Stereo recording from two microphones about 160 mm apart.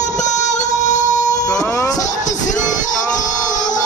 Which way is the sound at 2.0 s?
50° left (ahead or behind).